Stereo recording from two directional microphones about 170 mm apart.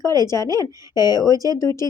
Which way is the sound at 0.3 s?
20° left (ahead or behind).